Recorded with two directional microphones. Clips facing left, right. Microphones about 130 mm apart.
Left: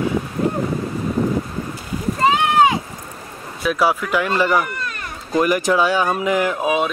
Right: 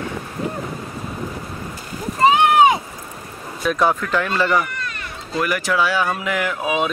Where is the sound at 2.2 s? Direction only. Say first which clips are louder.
Right 2 dB; 20° right (ahead or behind).